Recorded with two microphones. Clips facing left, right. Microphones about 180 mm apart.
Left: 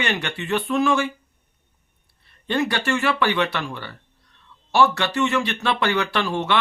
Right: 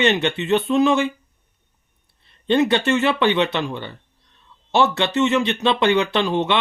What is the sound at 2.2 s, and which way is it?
Speech, 20° right (ahead or behind).